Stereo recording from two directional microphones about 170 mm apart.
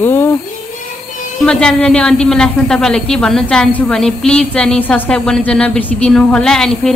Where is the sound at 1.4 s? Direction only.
5° left (ahead or behind).